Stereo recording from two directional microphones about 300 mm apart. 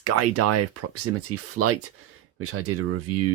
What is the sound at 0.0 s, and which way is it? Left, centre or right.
Speech, right.